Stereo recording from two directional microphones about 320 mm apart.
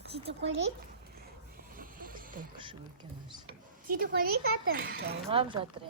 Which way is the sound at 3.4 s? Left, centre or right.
Right.